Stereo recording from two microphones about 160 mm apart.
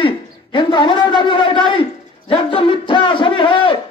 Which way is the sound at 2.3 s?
30° left (ahead or behind).